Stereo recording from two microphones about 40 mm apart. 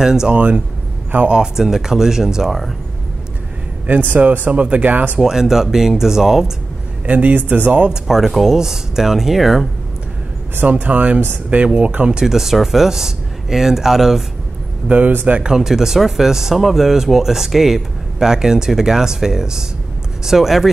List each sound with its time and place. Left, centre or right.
0.0 s speech: centre
0.3 s speech: right
1.3 s speech: centre
3.8 s speech: right
4.5 s speech: right
5.2 s speech: centre
7.1 s speech: right
8.3 s speech: centre
10.6 s speech: right
12.1 s speech: centre
14.9 s speech: right
15.4 s speech: centre